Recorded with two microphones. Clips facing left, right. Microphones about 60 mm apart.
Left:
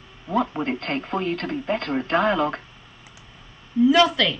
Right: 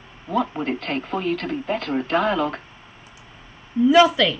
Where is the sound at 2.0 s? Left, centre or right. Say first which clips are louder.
Even; left.